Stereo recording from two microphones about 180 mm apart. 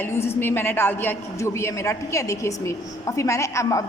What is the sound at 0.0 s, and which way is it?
A man's voice, 15° left (ahead or behind).